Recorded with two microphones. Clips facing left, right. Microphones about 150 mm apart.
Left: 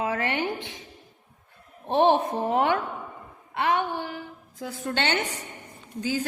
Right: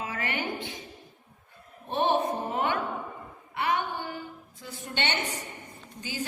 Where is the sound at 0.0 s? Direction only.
70° left (ahead or behind).